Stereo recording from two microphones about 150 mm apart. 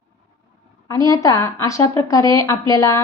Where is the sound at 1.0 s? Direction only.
20° left (ahead or behind).